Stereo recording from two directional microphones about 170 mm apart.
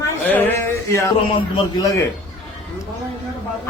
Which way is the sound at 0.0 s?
10° left (ahead or behind).